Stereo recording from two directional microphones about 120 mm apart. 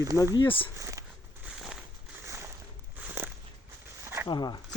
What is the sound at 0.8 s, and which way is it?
Speech, 25° right (ahead or behind).